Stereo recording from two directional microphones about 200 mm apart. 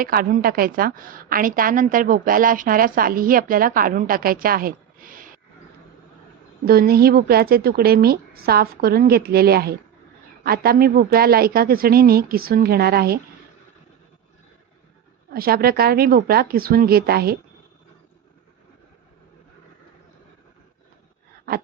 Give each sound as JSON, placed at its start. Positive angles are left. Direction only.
{"t": 0.0, "sound": "a woman's voice", "side_deg": -45}
{"t": 6.7, "sound": "a woman's voice", "side_deg": -50}
{"t": 15.3, "sound": "a woman's voice", "side_deg": -50}